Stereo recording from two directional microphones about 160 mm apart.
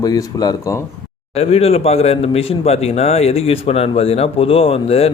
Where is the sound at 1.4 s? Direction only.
40° left (ahead or behind).